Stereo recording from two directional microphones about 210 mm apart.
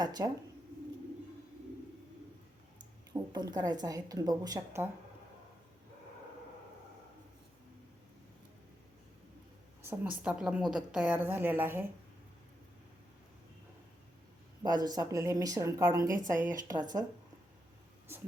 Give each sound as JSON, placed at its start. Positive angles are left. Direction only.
{"t": 0.0, "sound": "speech", "side_deg": -20}
{"t": 3.1, "sound": "a woman's voice", "side_deg": -20}
{"t": 9.8, "sound": "a sound", "side_deg": -10}
{"t": 10.2, "sound": "a woman's voice", "side_deg": -5}
{"t": 14.6, "sound": "a woman's voice", "side_deg": -20}